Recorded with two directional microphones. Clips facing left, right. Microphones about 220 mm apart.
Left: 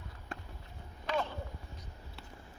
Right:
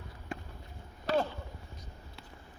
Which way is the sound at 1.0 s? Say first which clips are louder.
Right 5 dB; 35° right (ahead or behind).